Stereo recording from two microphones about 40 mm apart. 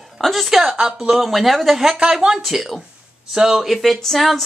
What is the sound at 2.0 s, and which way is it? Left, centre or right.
Speech, centre.